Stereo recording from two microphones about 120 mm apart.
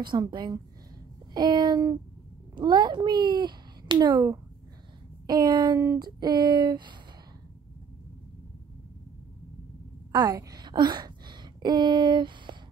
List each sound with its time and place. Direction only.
0.0 s a child's voice: 40° right (ahead or behind)
10.1 s a woman's voice: 30° right (ahead or behind)